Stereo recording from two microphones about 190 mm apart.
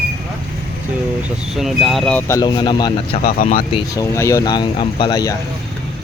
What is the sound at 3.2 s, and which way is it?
Speech, 50° left (ahead or behind).